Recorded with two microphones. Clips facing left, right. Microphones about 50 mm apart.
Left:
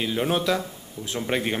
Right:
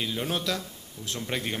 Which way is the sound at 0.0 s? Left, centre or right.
Centre.